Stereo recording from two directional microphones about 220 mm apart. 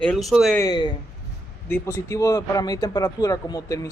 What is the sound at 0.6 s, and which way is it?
Speech, 20° left (ahead or behind).